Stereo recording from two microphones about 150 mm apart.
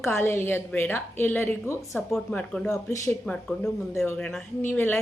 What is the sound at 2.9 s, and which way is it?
Speech, 20° left (ahead or behind).